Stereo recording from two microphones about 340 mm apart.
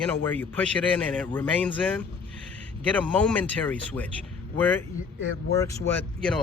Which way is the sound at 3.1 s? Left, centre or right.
Centre.